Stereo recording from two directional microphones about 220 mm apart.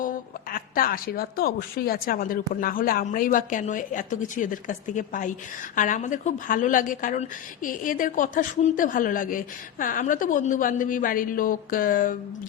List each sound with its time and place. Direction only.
0.0 s a woman's voice: 40° left (ahead or behind)